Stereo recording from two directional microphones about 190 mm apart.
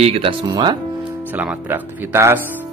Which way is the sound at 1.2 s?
10° right (ahead or behind).